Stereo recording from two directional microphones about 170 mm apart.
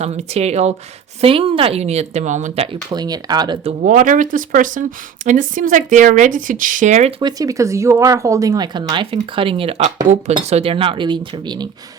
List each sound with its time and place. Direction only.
0.0 s speech: 40° right (ahead or behind)
2.9 s speech: 25° right (ahead or behind)
3.6 s speech: 40° right (ahead or behind)
7.2 s speech: 25° right (ahead or behind)